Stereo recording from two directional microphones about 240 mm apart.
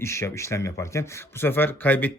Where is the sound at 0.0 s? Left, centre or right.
Centre.